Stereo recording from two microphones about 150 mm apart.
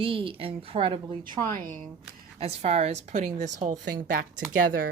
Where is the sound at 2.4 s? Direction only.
45° right (ahead or behind).